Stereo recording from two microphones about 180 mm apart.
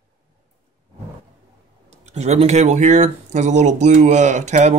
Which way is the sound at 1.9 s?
40° right (ahead or behind).